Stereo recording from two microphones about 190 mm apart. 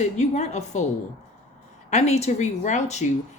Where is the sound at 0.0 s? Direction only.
35° left (ahead or behind).